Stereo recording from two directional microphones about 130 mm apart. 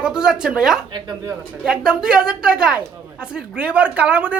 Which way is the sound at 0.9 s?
30° right (ahead or behind).